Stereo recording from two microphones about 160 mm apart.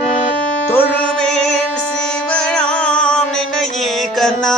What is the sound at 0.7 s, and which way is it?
Music, 10° left (ahead or behind).